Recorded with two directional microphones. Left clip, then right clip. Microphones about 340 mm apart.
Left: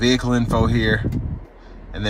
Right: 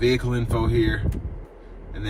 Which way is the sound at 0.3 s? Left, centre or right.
Centre.